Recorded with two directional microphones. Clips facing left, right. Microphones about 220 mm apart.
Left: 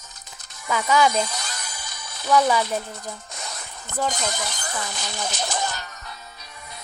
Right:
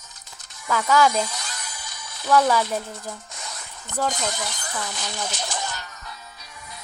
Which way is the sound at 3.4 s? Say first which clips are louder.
Left 2 dB; 60° left (ahead or behind).